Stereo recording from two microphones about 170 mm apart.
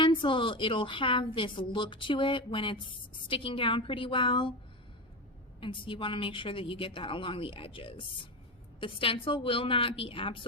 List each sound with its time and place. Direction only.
0.0 s a woman's voice: 30° left (ahead or behind)
5.5 s speech: 30° left (ahead or behind)